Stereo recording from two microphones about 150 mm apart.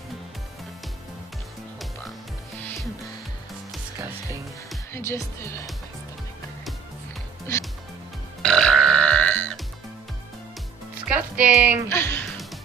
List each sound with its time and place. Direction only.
4.9 s speech: 15° left (ahead or behind)
8.4 s burping: 5° left (ahead or behind)
11.1 s speech: 10° right (ahead or behind)
11.9 s music: 15° left (ahead or behind)